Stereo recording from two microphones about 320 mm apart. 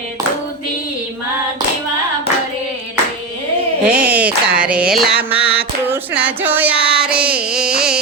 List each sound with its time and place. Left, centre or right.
3.8 s a sound: centre
5.3 s music: centre
5.9 s child singing: centre